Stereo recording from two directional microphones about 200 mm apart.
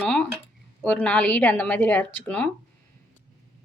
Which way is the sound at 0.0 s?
5° left (ahead or behind).